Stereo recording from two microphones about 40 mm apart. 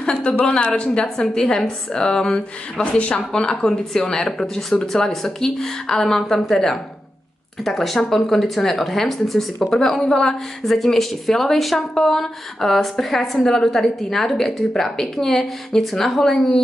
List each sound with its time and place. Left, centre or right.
0.6 s a woman's voice: left
2.8 s speech: left
3.3 s a woman's voice: centre